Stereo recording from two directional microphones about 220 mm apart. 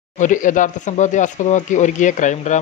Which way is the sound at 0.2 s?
35° left (ahead or behind).